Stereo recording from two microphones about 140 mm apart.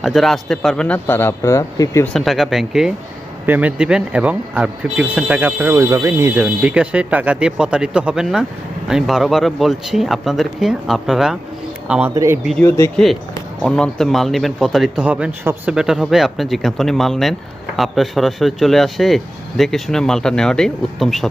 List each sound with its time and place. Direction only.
0.0 s speech: centre (ahead or behind); by 2.0 s 20° left (ahead or behind)
2.1 s speech: centre (ahead or behind)
12.1 s speech: 20° right (ahead or behind)
12.6 s speech: 20° left (ahead or behind)
13.6 s speech: 5° left (ahead or behind)
15.0 s speech: 10° right (ahead or behind)